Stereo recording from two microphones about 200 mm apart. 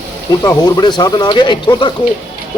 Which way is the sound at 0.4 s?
20° left (ahead or behind).